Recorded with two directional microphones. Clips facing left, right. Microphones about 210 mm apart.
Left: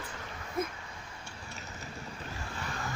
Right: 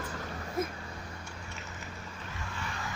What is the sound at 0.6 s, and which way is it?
Speech, centre (ahead or behind).